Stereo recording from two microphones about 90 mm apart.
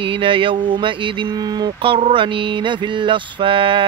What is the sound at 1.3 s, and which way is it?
Speech, 50° right (ahead or behind).